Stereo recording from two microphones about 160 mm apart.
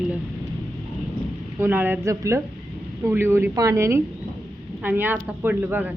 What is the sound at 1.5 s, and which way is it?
Speech, 15° right (ahead or behind).